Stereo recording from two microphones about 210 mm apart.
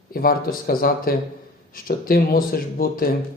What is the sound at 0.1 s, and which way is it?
Speech, 45° left (ahead or behind).